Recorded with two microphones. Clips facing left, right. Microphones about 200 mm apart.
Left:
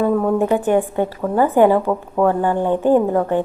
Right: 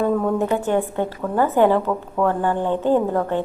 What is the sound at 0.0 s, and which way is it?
A woman's voice, 10° left (ahead or behind).